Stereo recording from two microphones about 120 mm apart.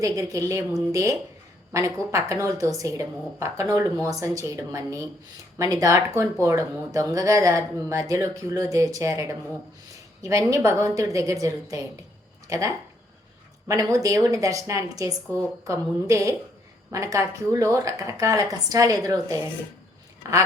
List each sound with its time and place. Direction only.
0.0 s speech: 25° right (ahead or behind)